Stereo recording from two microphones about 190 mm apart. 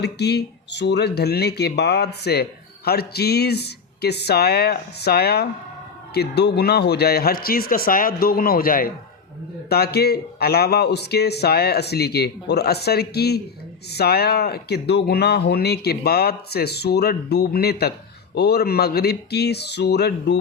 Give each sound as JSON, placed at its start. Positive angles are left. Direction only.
{"t": 0.0, "sound": "speech", "side_deg": 60}